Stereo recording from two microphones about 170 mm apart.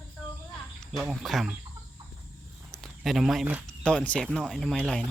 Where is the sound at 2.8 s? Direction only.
Centre (ahead or behind).